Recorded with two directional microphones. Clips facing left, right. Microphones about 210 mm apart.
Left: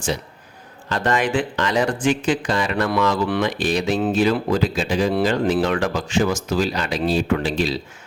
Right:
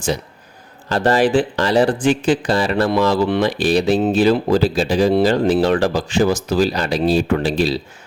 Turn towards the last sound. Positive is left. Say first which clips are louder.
# right 3 dB
turn(degrees=-35)  # may be behind; listen again after turning